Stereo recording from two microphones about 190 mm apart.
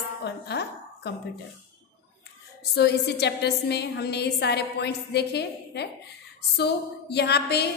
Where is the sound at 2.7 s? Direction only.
60° left (ahead or behind).